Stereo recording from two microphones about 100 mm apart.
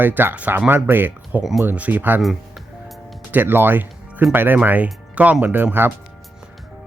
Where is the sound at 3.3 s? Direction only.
20° right (ahead or behind).